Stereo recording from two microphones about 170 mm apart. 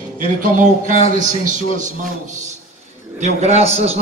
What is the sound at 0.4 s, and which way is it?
Speech, 50° right (ahead or behind).